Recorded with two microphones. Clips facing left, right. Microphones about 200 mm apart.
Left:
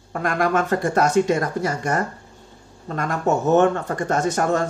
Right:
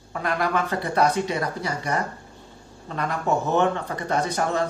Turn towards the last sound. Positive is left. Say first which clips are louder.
# left 3 dB
turn(degrees=45)  # may be behind; listen again after turning